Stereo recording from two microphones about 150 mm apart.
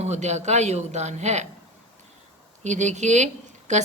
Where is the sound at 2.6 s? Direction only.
50° right (ahead or behind).